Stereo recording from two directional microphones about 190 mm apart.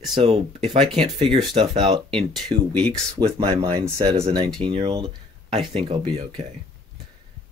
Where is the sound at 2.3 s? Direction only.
5° left (ahead or behind).